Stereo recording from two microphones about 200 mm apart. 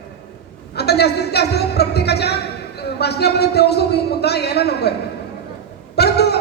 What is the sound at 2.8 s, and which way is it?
Speech, 55° left (ahead or behind).